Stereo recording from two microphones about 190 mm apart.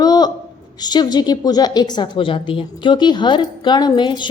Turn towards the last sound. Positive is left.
turn(degrees=25)  # may be behind; listen again after turning